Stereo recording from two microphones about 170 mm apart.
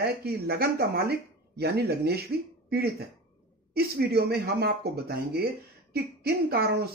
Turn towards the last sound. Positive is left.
turn(degrees=-65)  # may be behind; listen again after turning